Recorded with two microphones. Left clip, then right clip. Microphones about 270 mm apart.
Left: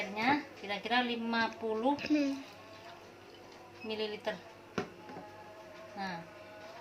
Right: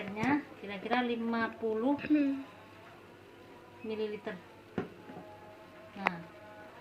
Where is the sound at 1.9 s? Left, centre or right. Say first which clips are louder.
Right 2 dB; centre.